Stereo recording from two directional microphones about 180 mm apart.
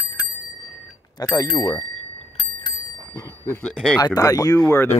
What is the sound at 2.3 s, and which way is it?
Bicycle bell, 30° left (ahead or behind).